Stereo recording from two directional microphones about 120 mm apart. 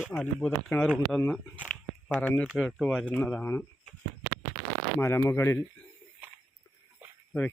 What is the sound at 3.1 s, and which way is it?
Speech, 10° left (ahead or behind).